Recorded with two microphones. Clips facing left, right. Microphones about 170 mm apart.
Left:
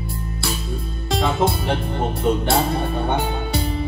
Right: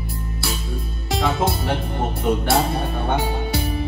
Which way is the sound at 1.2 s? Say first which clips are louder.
Left 1 dB; 20° left (ahead or behind).